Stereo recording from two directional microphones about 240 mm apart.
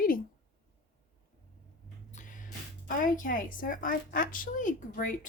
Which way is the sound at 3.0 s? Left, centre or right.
Left.